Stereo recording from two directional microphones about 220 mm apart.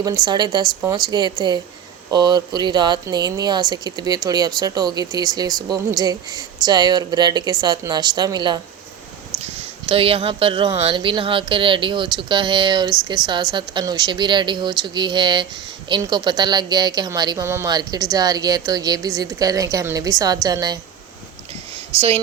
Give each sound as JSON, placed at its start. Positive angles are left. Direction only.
{"t": 0.0, "sound": "a woman's voice", "side_deg": -20}
{"t": 21.9, "sound": "speech", "side_deg": -25}